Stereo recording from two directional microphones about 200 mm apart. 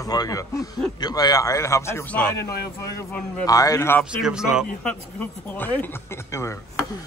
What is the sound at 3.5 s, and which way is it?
Speech, 15° left (ahead or behind).